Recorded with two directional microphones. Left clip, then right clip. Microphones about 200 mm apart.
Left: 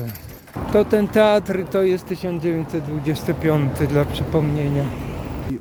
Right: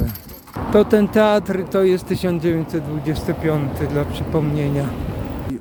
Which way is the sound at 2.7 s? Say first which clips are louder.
Right 1 dB; centre (ahead or behind).